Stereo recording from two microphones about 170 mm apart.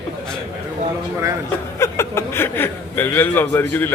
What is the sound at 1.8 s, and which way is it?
Speech, 15° left (ahead or behind).